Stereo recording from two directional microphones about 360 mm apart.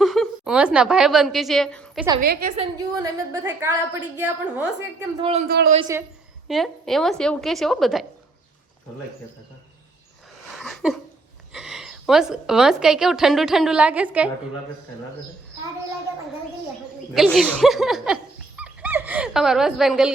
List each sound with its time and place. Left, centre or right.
0.0 s a woman's voice: centre
2.2 s a woman's voice: right; by 5.3 s centre
5.3 s a man's voice: right
6.5 s a woman's voice: centre
10.5 s a sound: centre
11.5 s a woman's voice: centre
17.2 s dog: centre